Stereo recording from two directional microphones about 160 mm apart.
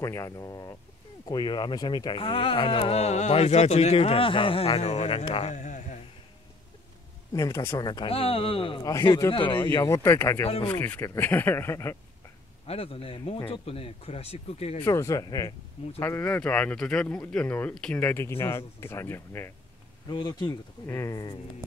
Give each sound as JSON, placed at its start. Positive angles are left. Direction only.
{"t": 0.0, "sound": "speech", "side_deg": 20}
{"t": 7.3, "sound": "speech", "side_deg": 20}
{"t": 8.1, "sound": "speech", "side_deg": 35}
{"t": 9.8, "sound": "speech", "side_deg": 15}
{"t": 10.4, "sound": "speech", "side_deg": 35}
{"t": 10.7, "sound": "speech", "side_deg": 15}
{"t": 12.6, "sound": "speech", "side_deg": 35}
{"t": 14.8, "sound": "speech", "side_deg": 15}
{"t": 20.1, "sound": "speech", "side_deg": 25}